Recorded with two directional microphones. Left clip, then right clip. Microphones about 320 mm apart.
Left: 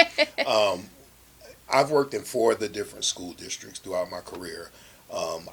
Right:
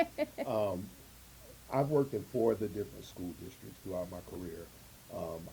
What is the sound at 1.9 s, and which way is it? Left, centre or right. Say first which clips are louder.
Speech: left 8 dB; centre.